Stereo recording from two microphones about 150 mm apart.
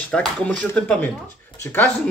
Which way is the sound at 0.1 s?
5° left (ahead or behind).